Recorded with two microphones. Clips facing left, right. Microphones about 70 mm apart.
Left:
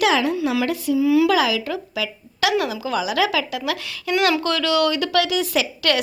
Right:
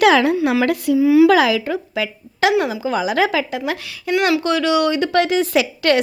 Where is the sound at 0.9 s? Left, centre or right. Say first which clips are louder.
Right 5 dB; right.